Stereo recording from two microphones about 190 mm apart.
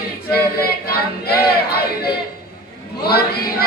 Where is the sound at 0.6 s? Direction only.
55° left (ahead or behind).